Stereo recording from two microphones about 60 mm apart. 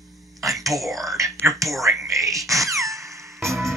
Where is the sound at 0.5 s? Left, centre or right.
Right.